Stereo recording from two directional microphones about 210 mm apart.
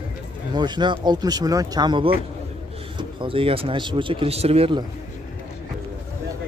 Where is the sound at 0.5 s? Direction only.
20° right (ahead or behind).